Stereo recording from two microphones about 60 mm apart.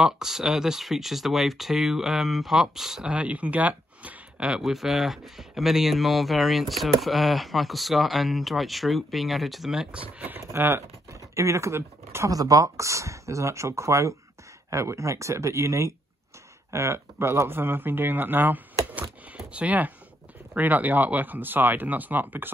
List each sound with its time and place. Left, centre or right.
0.0 s speech: centre; by 4.2 s right
4.4 s speech: centre
10.5 s speech: right
11.1 s a sound: right
12.3 s speech: right
18.9 s a sound: right
20.5 s speech: right